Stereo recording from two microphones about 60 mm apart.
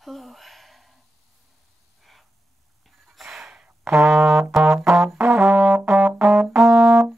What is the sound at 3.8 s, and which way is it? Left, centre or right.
Brass instrument, right.